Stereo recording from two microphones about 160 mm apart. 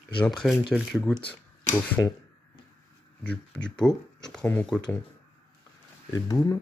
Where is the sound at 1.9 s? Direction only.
25° left (ahead or behind).